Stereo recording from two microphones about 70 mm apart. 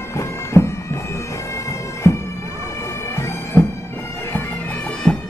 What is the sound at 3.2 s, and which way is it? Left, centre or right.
Bagpipes, left.